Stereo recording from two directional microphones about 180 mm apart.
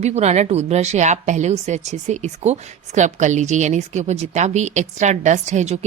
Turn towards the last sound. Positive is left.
turn(degrees=-40)  # may be behind; listen again after turning